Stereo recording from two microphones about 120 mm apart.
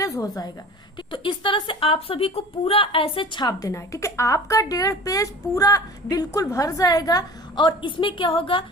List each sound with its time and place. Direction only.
0.0 s a woman's voice: 30° left (ahead or behind)
1.1 s speech: 45° left (ahead or behind)